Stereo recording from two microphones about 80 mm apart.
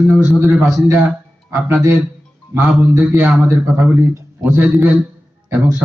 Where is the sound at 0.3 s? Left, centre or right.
Right.